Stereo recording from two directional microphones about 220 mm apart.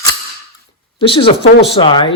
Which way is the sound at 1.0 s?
25° left (ahead or behind).